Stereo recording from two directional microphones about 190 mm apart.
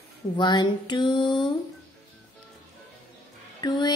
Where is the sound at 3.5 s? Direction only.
20° left (ahead or behind).